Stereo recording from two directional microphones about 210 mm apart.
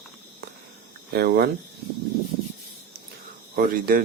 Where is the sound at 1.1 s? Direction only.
50° right (ahead or behind).